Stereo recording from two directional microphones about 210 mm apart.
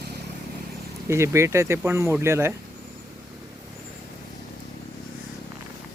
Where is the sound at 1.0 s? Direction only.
15° right (ahead or behind).